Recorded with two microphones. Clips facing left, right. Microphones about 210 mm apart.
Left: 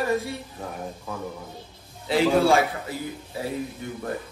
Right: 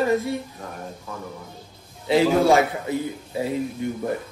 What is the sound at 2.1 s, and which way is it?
A man's voice, 15° right (ahead or behind).